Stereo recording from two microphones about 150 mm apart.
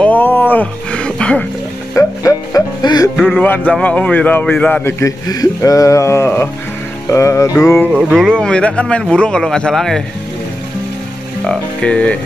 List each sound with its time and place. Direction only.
0.0 s music: 10° left (ahead or behind)
2.0 s music: 20° left (ahead or behind)
3.3 s a man's voice: 10° left (ahead or behind)
7.1 s music: 20° left (ahead or behind)
8.2 s a man's voice: 5° left (ahead or behind)
11.4 s a man's voice: 5° left (ahead or behind)